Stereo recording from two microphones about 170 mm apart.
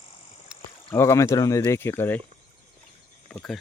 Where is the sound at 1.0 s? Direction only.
15° left (ahead or behind).